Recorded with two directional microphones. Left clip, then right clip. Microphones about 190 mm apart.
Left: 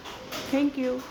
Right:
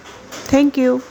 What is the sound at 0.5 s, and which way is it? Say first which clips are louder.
Speech: right 12 dB; 45° right (ahead or behind).